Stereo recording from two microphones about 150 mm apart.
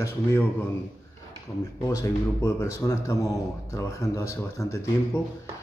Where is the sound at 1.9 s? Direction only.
20° left (ahead or behind).